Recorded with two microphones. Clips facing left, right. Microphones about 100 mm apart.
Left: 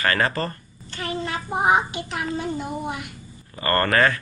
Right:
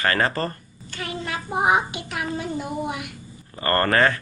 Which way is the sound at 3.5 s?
25° right (ahead or behind).